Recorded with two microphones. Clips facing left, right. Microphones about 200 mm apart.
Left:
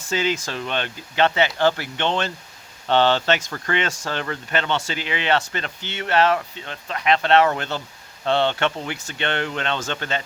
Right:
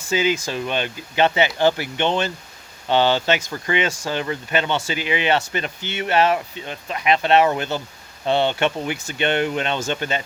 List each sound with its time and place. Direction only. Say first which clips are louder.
0.1 s speech: right 3 dB; 5° right (ahead or behind)